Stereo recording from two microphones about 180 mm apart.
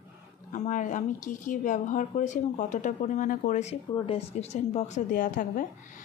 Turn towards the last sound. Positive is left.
turn(degrees=45)  # may be behind; listen again after turning